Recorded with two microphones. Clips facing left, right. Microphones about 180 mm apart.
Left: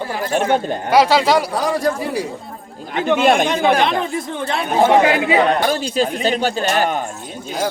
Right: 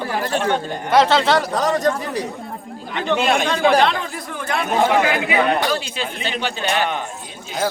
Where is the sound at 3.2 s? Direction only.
50° left (ahead or behind).